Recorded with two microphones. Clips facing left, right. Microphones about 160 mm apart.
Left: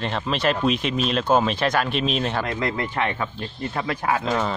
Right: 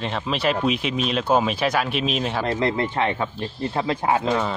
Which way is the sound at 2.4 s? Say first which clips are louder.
Right 3 dB; 30° right (ahead or behind).